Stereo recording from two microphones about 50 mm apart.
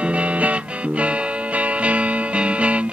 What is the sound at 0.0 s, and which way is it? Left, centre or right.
Music, right.